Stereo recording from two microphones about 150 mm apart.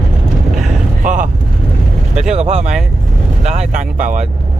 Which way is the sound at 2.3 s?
50° right (ahead or behind).